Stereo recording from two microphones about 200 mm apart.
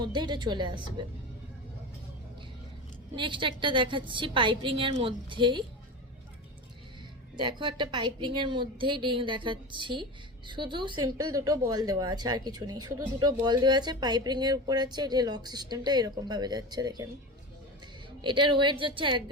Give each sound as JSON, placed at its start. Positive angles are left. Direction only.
{"t": 0.0, "sound": "a woman's voice", "side_deg": -20}
{"t": 3.2, "sound": "a woman's voice", "side_deg": -25}
{"t": 7.3, "sound": "a woman's voice", "side_deg": -25}
{"t": 18.2, "sound": "a woman's voice", "side_deg": -20}